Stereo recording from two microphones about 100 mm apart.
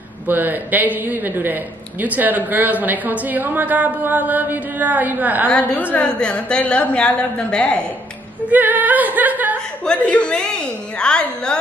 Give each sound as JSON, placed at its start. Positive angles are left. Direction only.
{"t": 0.3, "sound": "a woman's voice", "side_deg": -20}
{"t": 5.5, "sound": "a woman's voice", "side_deg": 15}
{"t": 8.5, "sound": "a woman's voice", "side_deg": -15}
{"t": 9.8, "sound": "a woman's voice", "side_deg": 15}